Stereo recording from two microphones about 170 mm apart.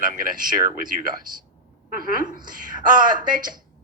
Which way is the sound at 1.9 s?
55° right (ahead or behind).